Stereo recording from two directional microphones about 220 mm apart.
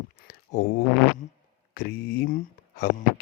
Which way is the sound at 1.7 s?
40° left (ahead or behind).